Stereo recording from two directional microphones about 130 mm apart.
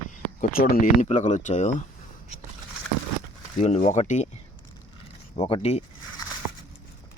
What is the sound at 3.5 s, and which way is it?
Speech, 55° left (ahead or behind).